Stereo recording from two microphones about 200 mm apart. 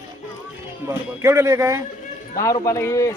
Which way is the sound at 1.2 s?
15° right (ahead or behind).